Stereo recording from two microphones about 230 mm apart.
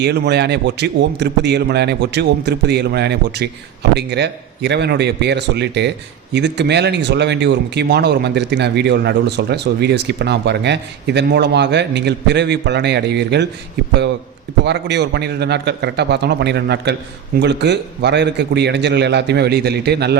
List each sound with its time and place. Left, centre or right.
0.0 s speech: right
14.6 s speech: right